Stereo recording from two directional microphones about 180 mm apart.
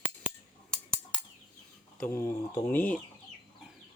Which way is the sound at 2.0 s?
15° left (ahead or behind).